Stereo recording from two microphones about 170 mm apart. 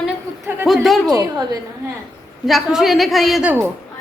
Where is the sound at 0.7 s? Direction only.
Centre (ahead or behind).